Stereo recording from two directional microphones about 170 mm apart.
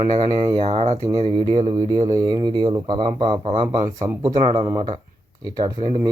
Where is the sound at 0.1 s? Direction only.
25° right (ahead or behind).